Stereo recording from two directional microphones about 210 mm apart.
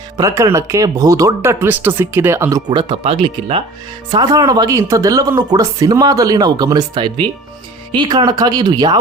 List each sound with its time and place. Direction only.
0.2 s speech: 15° right (ahead or behind)